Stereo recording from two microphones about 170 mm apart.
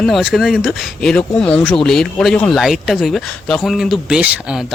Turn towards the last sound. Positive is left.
turn(degrees=-5)  # may be behind; listen again after turning